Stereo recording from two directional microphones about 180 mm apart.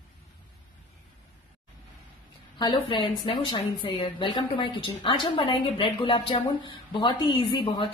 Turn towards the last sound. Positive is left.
turn(degrees=25)  # may be behind; listen again after turning